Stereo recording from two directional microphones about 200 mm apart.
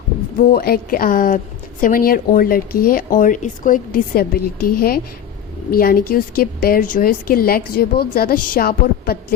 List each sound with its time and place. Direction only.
0.4 s a woman's voice: 50° left (ahead or behind)